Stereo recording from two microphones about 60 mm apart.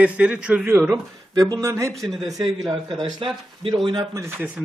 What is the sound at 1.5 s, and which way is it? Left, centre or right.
Speech, right.